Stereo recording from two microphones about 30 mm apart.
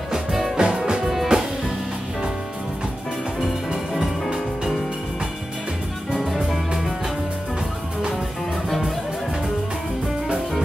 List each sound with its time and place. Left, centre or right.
0.1 s music: centre
0.6 s music: right
1.0 s music: centre
6.2 s music: centre
8.6 s music: centre